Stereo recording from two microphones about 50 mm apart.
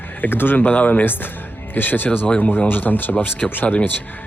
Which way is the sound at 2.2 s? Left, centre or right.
Left.